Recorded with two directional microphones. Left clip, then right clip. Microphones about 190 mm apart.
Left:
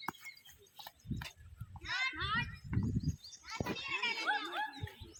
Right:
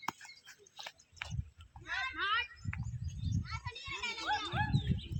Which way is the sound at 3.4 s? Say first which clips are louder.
Left 5 dB; 45° left (ahead or behind).